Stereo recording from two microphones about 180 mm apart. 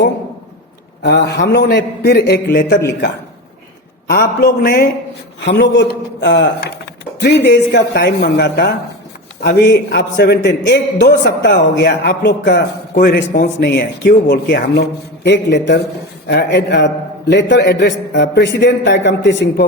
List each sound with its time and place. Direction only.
1.0 s a man's voice: 70° left (ahead or behind)
4.0 s a man's voice: 55° left (ahead or behind)
5.4 s a man's voice: 80° left
12.9 s a man's voice: 50° left (ahead or behind)
13.6 s a man's voice: 70° left (ahead or behind)